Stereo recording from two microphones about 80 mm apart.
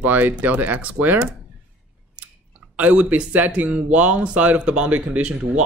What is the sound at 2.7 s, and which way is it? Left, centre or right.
Speech, centre.